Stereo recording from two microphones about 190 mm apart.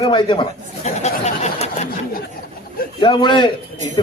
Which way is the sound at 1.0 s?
35° left (ahead or behind).